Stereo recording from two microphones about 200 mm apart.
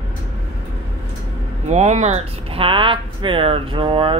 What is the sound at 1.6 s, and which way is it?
Speech, 35° right (ahead or behind).